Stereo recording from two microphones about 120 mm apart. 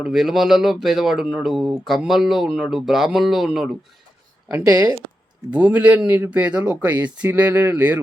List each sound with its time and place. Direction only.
0.0 s speech: 5° right (ahead or behind)
5.5 s a man's voice: 10° right (ahead or behind)